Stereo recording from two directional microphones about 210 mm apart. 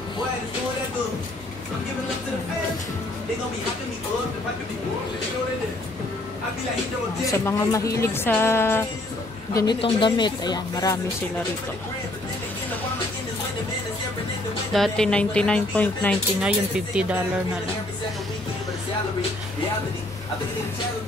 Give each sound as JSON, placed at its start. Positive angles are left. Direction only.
{"t": 7.2, "sound": "speech", "side_deg": 15}
{"t": 14.7, "sound": "speech", "side_deg": 0}
{"t": 16.3, "sound": "speech", "side_deg": -5}